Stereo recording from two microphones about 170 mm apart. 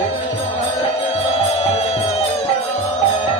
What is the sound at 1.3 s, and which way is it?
Music, 40° left (ahead or behind).